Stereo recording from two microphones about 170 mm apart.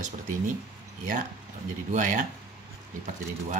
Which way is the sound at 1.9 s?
50° right (ahead or behind).